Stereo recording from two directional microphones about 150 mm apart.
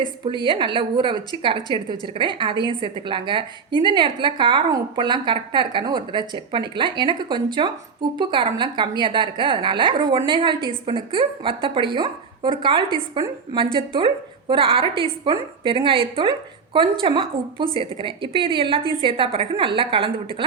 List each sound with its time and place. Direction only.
0.0 s a woman's voice: 30° right (ahead or behind)